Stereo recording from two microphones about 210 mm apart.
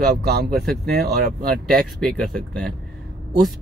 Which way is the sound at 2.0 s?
Centre (ahead or behind).